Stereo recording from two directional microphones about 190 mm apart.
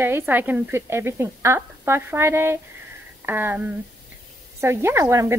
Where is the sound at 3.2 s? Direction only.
10° right (ahead or behind).